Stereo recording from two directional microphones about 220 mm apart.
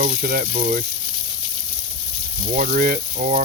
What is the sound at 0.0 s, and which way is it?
Speech, 40° right (ahead or behind).